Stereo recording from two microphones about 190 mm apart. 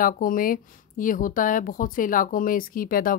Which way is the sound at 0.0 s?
50° left (ahead or behind).